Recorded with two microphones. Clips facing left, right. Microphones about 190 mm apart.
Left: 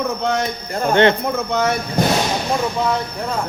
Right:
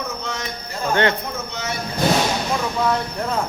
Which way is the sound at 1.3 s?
55° left (ahead or behind).